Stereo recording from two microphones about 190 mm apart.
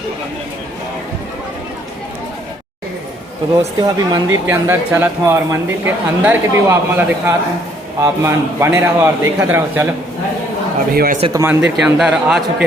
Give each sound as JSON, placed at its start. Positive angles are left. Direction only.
{"t": 3.8, "sound": "speech", "side_deg": -20}
{"t": 10.9, "sound": "speech", "side_deg": -50}
{"t": 11.3, "sound": "speech", "side_deg": -15}
{"t": 11.6, "sound": "speech", "side_deg": -5}